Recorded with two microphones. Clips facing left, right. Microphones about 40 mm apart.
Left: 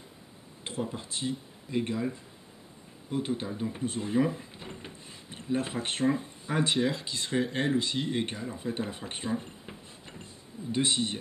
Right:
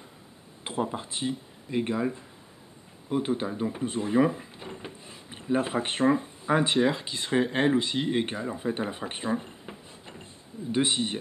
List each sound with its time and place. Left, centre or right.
0.7 s speech: right
3.7 s a sound: centre
5.3 s speech: centre